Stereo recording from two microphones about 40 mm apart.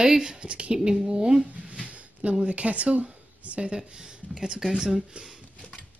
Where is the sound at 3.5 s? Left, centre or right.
Right.